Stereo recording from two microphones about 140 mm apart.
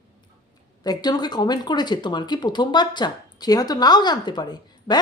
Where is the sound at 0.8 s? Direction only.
30° left (ahead or behind).